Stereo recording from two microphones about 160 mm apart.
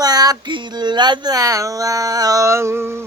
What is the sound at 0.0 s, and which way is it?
Speech, 25° right (ahead or behind).